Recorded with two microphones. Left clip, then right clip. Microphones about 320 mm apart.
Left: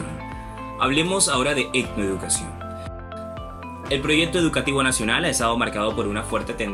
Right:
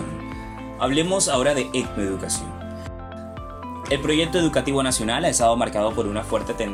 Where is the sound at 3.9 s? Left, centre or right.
Right.